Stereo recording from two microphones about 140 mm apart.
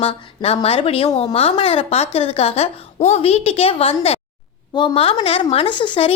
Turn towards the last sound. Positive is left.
turn(degrees=40)  # may be behind; listen again after turning